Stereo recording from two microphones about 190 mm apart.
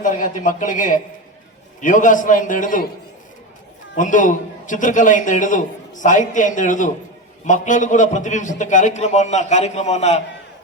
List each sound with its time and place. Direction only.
0.0 s a man's voice: 45° left (ahead or behind)
3.9 s a man's voice: 45° left (ahead or behind)